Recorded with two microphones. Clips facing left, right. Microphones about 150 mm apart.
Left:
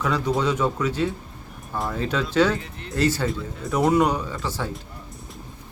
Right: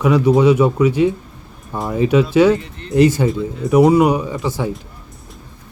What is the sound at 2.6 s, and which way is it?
Speech, 5° left (ahead or behind).